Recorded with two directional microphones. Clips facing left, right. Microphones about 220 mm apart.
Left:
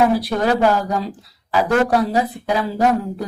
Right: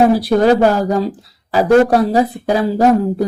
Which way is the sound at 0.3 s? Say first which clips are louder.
Right 6 dB; 35° right (ahead or behind).